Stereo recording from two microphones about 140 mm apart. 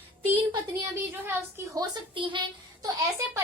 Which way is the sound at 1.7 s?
30° right (ahead or behind).